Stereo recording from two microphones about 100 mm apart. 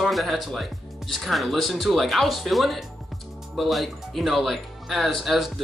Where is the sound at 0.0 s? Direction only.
Centre (ahead or behind).